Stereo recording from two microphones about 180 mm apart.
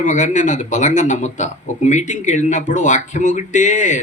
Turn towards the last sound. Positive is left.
turn(degrees=40)  # may be behind; listen again after turning